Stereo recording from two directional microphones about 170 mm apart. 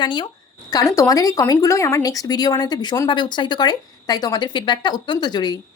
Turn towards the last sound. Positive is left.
turn(degrees=25)  # may be behind; listen again after turning